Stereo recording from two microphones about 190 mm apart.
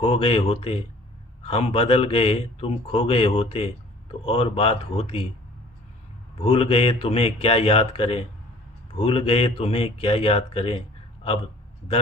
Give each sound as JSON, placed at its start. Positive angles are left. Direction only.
{"t": 0.0, "sound": "speech", "side_deg": 30}
{"t": 6.4, "sound": "speech", "side_deg": 30}